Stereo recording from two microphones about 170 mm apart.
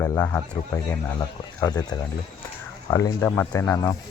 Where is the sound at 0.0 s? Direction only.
15° left (ahead or behind).